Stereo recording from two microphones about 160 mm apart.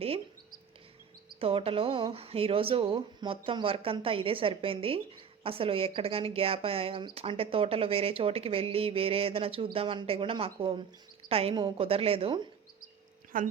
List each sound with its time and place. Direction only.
1.4 s speech: 35° right (ahead or behind)
13.3 s speech: 60° right (ahead or behind)